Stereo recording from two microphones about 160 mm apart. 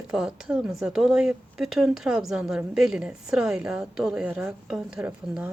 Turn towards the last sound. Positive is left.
turn(degrees=-5)  # may be behind; listen again after turning